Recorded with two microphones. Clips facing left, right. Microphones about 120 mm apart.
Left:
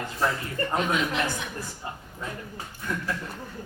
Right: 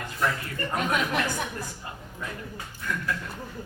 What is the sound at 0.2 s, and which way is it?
Speech, 30° left (ahead or behind).